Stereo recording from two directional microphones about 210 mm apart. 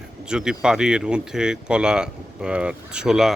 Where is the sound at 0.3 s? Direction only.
5° right (ahead or behind).